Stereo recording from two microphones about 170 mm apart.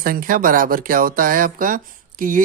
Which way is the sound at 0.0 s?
55° right (ahead or behind).